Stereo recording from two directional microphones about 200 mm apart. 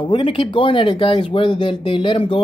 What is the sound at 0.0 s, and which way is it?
Speech, 25° left (ahead or behind).